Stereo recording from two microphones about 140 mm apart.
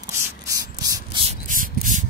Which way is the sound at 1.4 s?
70° right (ahead or behind).